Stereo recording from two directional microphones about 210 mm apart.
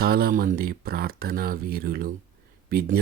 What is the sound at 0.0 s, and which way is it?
Speech, 45° right (ahead or behind).